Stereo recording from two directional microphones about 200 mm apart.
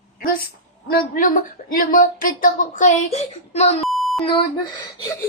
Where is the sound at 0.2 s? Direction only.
45° left (ahead or behind).